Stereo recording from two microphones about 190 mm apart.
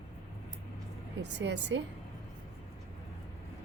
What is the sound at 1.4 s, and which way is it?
Speech, 70° right (ahead or behind).